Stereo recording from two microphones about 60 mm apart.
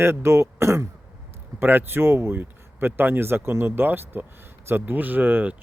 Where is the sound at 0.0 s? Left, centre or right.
Right.